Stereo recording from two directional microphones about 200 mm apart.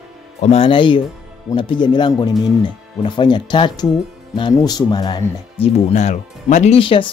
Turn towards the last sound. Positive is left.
turn(degrees=25)  # may be behind; listen again after turning